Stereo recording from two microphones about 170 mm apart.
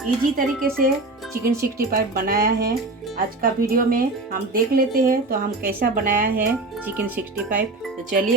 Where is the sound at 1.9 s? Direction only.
60° right (ahead or behind).